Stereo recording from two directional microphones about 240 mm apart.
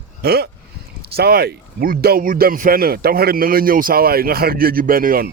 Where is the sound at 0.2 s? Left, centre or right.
Right.